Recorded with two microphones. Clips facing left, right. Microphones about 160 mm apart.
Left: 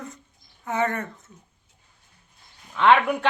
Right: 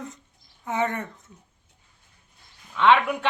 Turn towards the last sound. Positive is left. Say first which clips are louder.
# left 1 dB
turn(degrees=0)  # may be behind; listen again after turning